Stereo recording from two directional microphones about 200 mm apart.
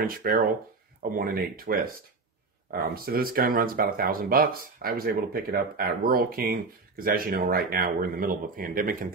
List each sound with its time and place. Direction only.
0.0 s speech: 45° right (ahead or behind)